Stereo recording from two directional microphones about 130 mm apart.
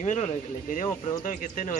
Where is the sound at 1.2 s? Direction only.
90° left.